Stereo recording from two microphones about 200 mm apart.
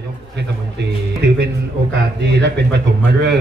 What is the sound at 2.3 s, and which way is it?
Speech, 60° right (ahead or behind).